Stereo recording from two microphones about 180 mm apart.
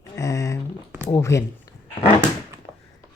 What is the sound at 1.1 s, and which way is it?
Speech, 15° left (ahead or behind).